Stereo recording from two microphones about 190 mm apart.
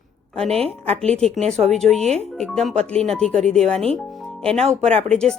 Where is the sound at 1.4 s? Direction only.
35° right (ahead or behind).